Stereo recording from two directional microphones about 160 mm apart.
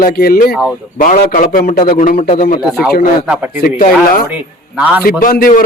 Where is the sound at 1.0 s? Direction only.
60° left (ahead or behind).